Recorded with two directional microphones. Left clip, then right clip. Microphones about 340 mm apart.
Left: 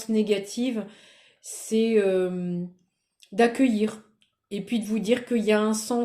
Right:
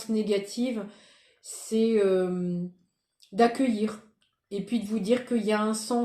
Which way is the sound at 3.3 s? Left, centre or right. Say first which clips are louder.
Left 2 dB; left.